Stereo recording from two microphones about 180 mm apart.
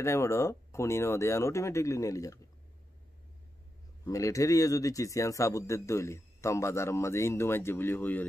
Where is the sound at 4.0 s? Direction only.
20° left (ahead or behind).